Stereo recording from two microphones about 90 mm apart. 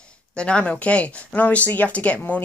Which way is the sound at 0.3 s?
10° left (ahead or behind).